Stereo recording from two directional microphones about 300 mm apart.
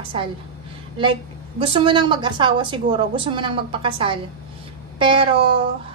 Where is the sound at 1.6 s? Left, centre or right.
Centre.